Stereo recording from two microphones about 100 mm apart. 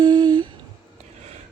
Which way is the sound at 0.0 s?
45° right (ahead or behind).